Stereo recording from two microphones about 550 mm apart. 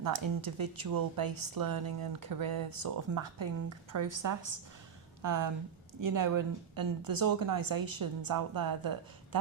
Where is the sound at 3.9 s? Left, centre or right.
Right.